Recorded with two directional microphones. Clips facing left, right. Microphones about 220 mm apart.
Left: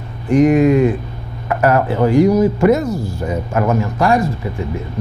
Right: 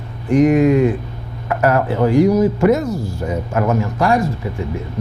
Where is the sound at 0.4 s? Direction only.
15° left (ahead or behind).